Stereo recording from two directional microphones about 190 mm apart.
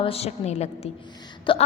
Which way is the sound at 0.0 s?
30° left (ahead or behind).